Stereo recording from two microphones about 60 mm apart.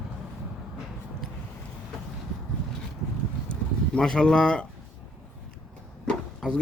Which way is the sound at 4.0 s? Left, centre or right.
Centre.